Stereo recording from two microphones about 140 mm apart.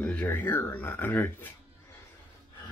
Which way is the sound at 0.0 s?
10° left (ahead or behind).